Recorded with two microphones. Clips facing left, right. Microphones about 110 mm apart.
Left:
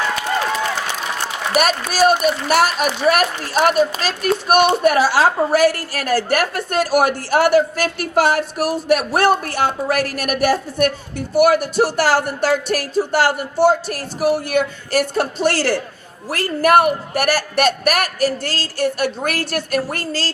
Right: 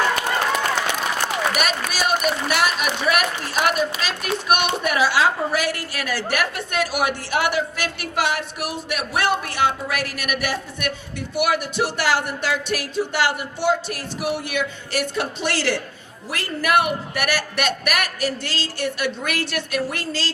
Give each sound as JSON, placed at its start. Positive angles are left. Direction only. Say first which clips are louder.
{"t": 1.5, "sound": "speech", "louder": "left 7 dB", "side_deg": 40}